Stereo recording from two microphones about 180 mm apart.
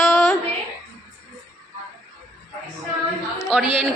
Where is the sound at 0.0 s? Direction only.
Centre (ahead or behind).